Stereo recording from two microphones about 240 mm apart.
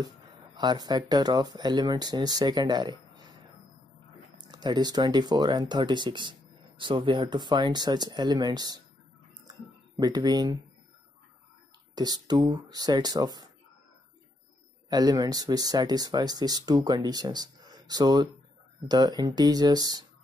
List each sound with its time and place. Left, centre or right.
0.6 s speech: centre
4.4 s speech: centre
11.9 s speech: centre
14.9 s speech: centre